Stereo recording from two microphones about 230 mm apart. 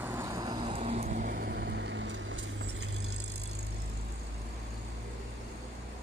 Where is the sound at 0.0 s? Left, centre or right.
Centre; by 2.6 s right.